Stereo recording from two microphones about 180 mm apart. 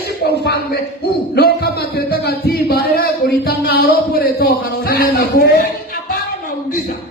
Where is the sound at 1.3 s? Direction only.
65° left (ahead or behind).